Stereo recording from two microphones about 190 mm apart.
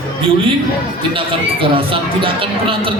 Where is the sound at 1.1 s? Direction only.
30° right (ahead or behind).